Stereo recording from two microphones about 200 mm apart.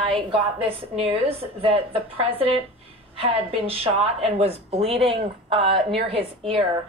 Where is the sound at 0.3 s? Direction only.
30° right (ahead or behind).